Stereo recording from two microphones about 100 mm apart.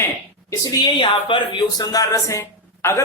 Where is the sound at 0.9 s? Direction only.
55° left (ahead or behind).